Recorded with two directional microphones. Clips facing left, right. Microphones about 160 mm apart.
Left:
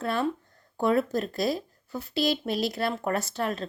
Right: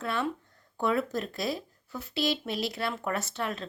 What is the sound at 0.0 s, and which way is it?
Speech, 40° left (ahead or behind).